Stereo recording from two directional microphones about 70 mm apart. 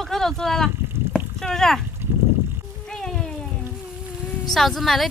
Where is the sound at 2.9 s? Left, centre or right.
Centre.